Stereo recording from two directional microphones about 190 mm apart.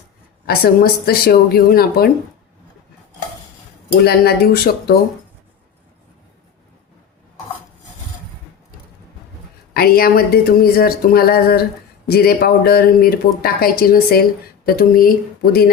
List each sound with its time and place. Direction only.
0.4 s speech: 55° left (ahead or behind)
4.0 s speech: 55° left (ahead or behind)
9.7 s speech: 55° left (ahead or behind)